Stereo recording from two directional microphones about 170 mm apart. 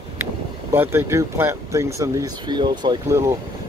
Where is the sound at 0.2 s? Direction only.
15° right (ahead or behind).